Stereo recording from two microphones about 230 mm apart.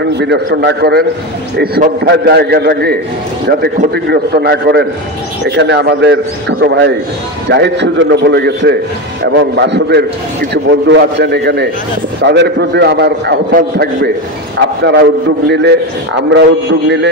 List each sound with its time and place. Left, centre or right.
0.2 s a man's voice: right